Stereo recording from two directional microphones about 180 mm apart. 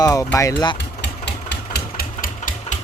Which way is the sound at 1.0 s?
70° left (ahead or behind).